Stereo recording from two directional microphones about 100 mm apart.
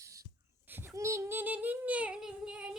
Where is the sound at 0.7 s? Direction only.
25° right (ahead or behind).